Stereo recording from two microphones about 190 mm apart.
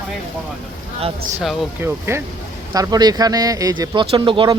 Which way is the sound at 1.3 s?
10° right (ahead or behind).